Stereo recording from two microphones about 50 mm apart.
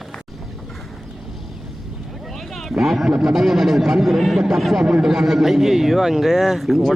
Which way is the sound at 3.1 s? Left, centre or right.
Centre.